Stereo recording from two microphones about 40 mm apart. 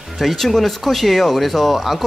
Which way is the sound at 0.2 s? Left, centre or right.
Centre.